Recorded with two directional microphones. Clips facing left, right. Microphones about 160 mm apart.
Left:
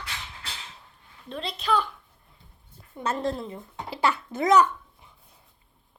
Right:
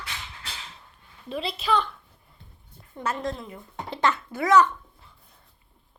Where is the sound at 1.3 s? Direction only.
5° right (ahead or behind).